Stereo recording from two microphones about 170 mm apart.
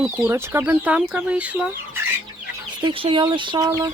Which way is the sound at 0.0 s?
10° right (ahead or behind).